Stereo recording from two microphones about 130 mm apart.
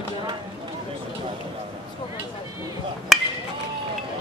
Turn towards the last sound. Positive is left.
turn(degrees=0)  # may be behind; listen again after turning